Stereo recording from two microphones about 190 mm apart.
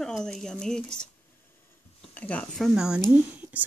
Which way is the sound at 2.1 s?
5° left (ahead or behind).